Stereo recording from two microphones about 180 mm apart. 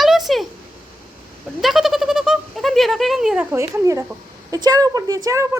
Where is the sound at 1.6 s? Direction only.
Centre (ahead or behind); by 4.0 s 15° right (ahead or behind).